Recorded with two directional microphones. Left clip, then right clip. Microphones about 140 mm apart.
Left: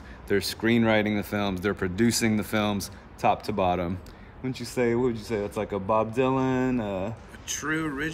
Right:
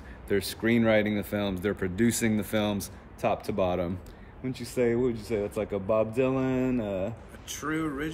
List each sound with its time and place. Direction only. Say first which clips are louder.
0.3 s speech: left 2 dB; 20° left (ahead or behind); by 7.1 s 45° left (ahead or behind)
7.4 s speech: left 3 dB; 20° right (ahead or behind)